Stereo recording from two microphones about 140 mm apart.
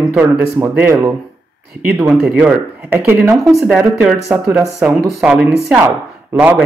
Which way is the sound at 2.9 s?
20° right (ahead or behind).